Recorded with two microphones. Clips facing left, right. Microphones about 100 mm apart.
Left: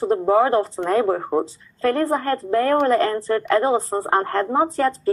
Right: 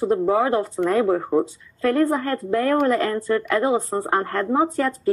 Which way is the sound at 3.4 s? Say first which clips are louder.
Left 2 dB; 30° left (ahead or behind).